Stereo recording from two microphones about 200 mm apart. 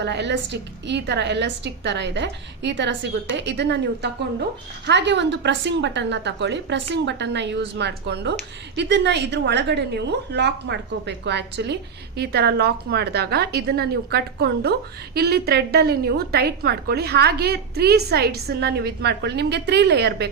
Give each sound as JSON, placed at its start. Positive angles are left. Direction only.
{"t": 0.0, "sound": "a woman's voice", "side_deg": -60}